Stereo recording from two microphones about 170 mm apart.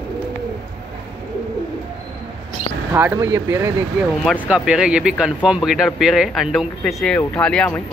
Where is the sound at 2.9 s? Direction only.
10° right (ahead or behind).